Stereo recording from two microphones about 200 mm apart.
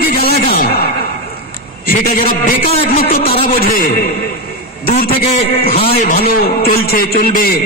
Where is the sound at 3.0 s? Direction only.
30° left (ahead or behind).